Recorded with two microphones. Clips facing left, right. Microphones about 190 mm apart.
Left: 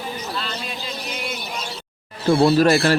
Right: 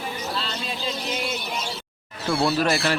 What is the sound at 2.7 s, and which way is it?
Speech, 50° left (ahead or behind).